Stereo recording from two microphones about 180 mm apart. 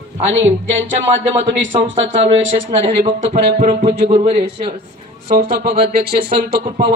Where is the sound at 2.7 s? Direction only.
30° right (ahead or behind).